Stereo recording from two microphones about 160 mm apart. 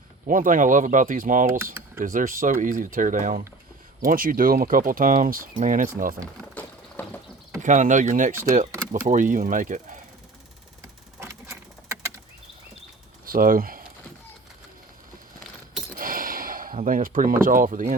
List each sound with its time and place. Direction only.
0.3 s speech: 55° right (ahead or behind)
6.5 s a sound: 10° left (ahead or behind)
7.6 s speech: 50° right (ahead or behind)
11.2 s a sound: 15° right (ahead or behind)
13.2 s speech: 60° right (ahead or behind)
16.0 s gasp: 60° right (ahead or behind)